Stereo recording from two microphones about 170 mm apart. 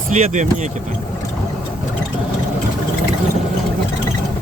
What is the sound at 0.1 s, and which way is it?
Speech, 45° right (ahead or behind).